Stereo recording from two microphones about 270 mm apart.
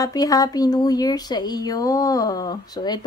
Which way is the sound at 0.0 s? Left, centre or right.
Centre.